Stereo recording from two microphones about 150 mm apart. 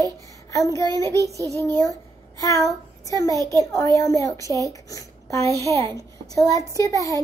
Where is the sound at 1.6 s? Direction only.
25° left (ahead or behind).